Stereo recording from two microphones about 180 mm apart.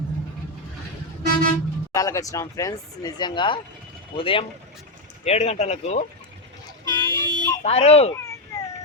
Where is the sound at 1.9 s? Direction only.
20° left (ahead or behind); by 6.0 s 40° left (ahead or behind).